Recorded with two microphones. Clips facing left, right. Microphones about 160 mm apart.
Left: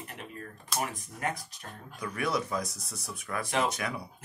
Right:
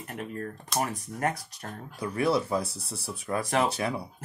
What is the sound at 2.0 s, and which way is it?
Speech, 30° right (ahead or behind).